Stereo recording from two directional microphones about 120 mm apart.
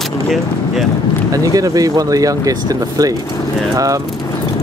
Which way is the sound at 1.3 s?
30° right (ahead or behind).